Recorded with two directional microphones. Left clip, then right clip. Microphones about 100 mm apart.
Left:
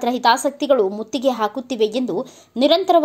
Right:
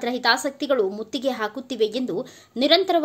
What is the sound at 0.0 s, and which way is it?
A woman's voice, 25° left (ahead or behind).